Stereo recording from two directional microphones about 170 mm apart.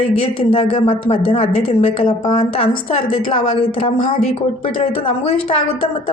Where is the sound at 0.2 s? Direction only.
35° left (ahead or behind).